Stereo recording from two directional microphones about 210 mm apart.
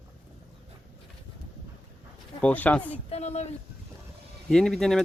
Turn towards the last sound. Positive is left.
turn(degrees=0)  # may be behind; listen again after turning